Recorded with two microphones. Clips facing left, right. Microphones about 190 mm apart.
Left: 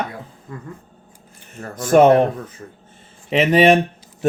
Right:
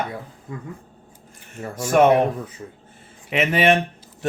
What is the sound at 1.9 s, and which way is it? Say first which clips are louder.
Speech: left 4 dB; 30° left (ahead or behind).